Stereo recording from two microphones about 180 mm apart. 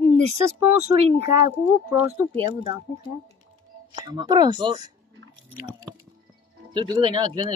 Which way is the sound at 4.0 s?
20° right (ahead or behind).